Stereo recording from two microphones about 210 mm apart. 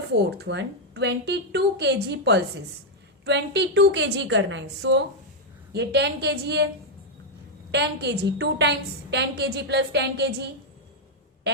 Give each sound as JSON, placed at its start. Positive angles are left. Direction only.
{"t": 0.2, "sound": "a woman's voice", "side_deg": -55}
{"t": 7.7, "sound": "a woman's voice", "side_deg": -55}